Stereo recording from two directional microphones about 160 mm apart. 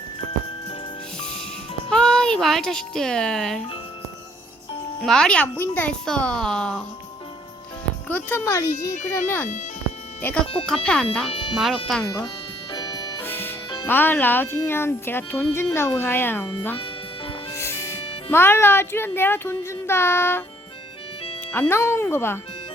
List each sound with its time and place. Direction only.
1.2 s music: 5° left (ahead or behind)
1.9 s speech: 5° left (ahead or behind)
5.0 s speech: 5° left (ahead or behind)
8.0 s speech: 10° left (ahead or behind)
10.4 s speech: 35° left (ahead or behind)
10.8 s speech: 5° left (ahead or behind)
11.3 s speech: 35° left (ahead or behind)
11.5 s speech: centre (ahead or behind)
12.7 s music: 25° left (ahead or behind)
13.2 s music: 10° left (ahead or behind)
13.8 s speech: 10° left (ahead or behind)
17.5 s music: 15° left (ahead or behind)
18.3 s speech: 15° left (ahead or behind)
21.5 s speech: 15° left (ahead or behind)